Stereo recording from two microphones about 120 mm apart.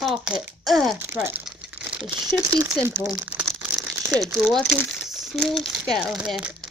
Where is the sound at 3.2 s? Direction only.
10° right (ahead or behind).